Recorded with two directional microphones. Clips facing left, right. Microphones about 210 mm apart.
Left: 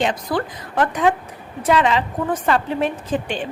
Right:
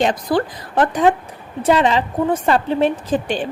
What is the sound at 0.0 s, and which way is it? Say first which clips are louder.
A woman's voice: right 4 dB; 35° right (ahead or behind).